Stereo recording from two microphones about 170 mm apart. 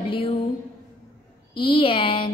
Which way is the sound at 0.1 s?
30° left (ahead or behind).